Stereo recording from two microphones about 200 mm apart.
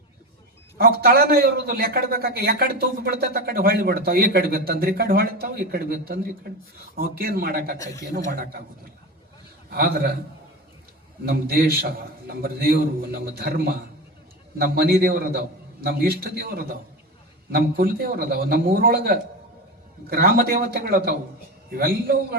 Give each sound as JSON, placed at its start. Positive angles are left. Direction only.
{"t": 0.8, "sound": "a man's voice", "side_deg": -50}
{"t": 9.6, "sound": "a man's voice", "side_deg": -50}
{"t": 11.3, "sound": "a man's voice", "side_deg": -50}
{"t": 14.6, "sound": "a man's voice", "side_deg": -50}